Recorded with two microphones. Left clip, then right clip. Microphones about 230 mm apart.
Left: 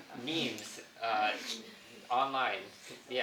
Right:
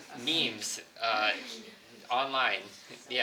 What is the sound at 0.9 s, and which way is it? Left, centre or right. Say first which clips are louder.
Speech: right 3 dB; right.